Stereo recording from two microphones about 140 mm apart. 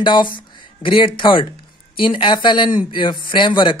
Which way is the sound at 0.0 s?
35° left (ahead or behind).